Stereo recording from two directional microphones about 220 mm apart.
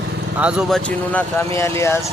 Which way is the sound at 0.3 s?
5° right (ahead or behind).